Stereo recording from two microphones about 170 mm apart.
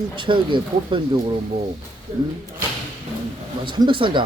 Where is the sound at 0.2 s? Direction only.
30° right (ahead or behind).